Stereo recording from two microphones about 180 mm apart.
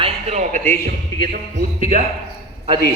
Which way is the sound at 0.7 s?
55° right (ahead or behind).